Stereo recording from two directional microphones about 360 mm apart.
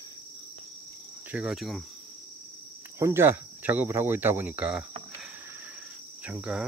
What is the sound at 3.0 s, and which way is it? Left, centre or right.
Speech, centre.